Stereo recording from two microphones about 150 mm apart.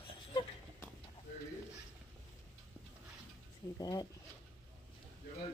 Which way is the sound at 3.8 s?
25° left (ahead or behind).